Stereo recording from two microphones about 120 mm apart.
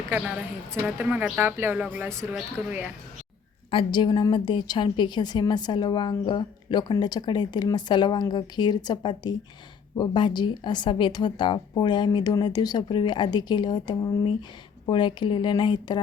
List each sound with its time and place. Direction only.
0.7 s speech: 20° right (ahead or behind)
3.7 s a woman's voice: 45° left (ahead or behind)